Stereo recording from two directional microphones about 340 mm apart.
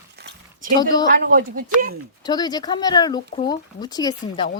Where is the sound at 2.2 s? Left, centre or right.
Centre.